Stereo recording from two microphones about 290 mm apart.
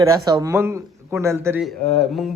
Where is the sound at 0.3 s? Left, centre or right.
Centre.